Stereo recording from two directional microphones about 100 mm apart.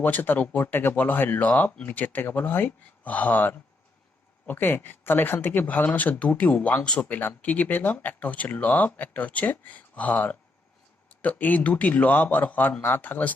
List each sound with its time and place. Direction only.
0.0 s speech: 20° left (ahead or behind)